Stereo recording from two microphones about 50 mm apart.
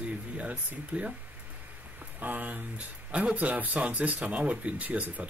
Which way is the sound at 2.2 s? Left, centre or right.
Right.